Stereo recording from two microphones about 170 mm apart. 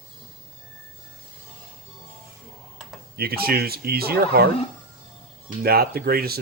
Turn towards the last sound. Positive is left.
turn(degrees=-65)  # may be behind; listen again after turning